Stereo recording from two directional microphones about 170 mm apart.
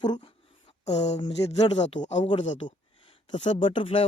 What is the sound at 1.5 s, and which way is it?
Speech, 25° left (ahead or behind).